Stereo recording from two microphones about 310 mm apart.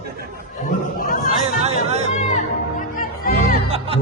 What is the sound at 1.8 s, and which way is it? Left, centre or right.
Chatter, right.